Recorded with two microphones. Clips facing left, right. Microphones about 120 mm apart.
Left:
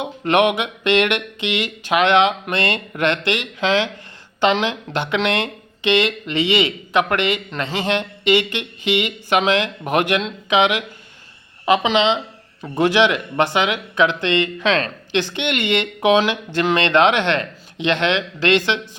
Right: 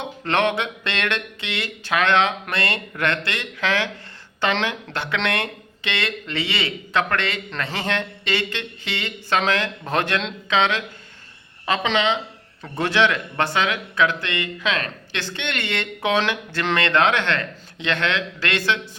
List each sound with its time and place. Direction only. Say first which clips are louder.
0.0 s a woman's voice: left 5 dB; 15° left (ahead or behind)